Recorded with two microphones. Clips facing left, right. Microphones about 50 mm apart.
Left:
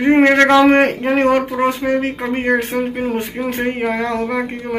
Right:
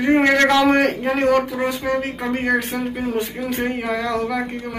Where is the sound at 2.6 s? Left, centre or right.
Left.